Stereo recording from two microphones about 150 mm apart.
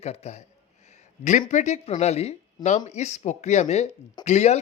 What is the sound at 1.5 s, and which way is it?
Speech, 50° left (ahead or behind).